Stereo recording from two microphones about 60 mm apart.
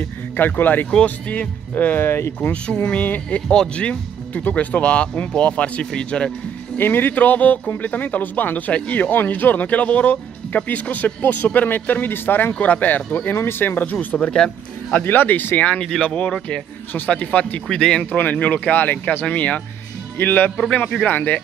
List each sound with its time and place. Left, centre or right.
0.4 s speech: left
2.5 s speech: centre
6.8 s speech: left
12.5 s speech: left
13.9 s speech: centre
15.0 s speech: left
15.8 s speech: centre
16.9 s speech: left
17.6 s speech: centre
18.1 s speech: left